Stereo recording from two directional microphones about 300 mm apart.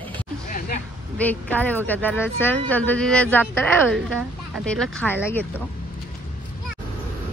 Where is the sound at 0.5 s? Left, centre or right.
Left.